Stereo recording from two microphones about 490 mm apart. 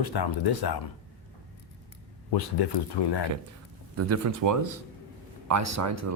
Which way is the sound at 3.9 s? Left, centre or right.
Right.